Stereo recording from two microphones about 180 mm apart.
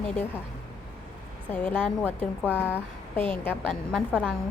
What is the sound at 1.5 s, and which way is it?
A woman's voice, 10° left (ahead or behind).